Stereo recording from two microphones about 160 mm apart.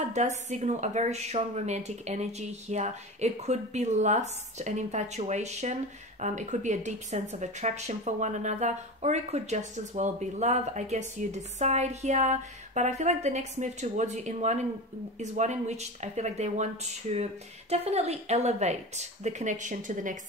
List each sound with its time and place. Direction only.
0.1 s speech: 45° right (ahead or behind)